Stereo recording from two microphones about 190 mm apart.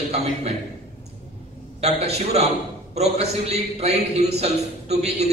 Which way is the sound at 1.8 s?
35° right (ahead or behind).